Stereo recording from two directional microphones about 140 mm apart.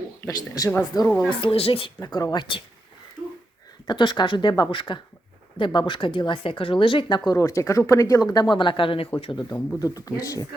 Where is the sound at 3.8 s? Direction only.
35° left (ahead or behind).